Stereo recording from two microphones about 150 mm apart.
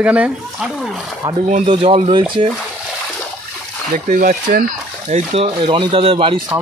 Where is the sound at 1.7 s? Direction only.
35° right (ahead or behind).